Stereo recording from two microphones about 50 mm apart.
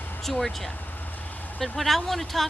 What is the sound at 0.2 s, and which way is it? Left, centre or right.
Speech, centre.